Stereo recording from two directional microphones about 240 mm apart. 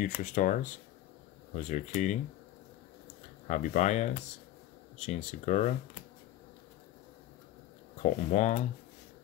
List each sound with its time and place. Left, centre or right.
0.0 s speech: left
3.4 s speech: left
8.0 s speech: left